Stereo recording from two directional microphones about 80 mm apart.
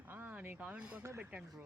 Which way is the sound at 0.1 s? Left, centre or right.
Right.